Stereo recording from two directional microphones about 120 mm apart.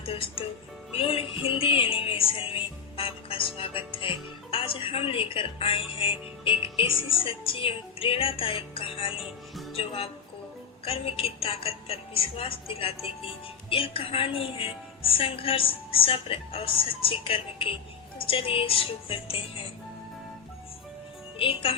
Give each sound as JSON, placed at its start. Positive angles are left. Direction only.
{"t": 0.0, "sound": "speech", "side_deg": 50}
{"t": 21.3, "sound": "speech", "side_deg": 50}